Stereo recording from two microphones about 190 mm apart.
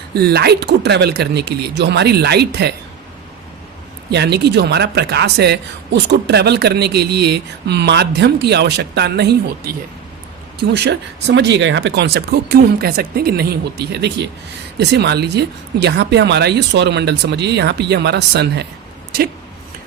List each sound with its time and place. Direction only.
0.1 s speech: 55° right (ahead or behind)
4.1 s speech: 60° right (ahead or behind)